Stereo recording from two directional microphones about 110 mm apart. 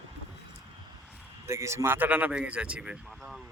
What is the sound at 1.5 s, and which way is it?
Speech, 25° right (ahead or behind).